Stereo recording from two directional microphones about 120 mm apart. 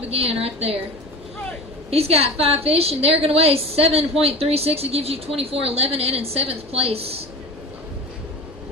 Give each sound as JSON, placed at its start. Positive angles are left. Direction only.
{"t": 0.1, "sound": "a woman's voice", "side_deg": -55}
{"t": 1.9, "sound": "a woman's voice", "side_deg": -55}